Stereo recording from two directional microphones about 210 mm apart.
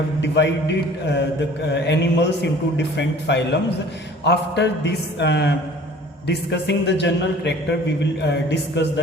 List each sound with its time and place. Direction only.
0.2 s a man's voice: 55° left (ahead or behind)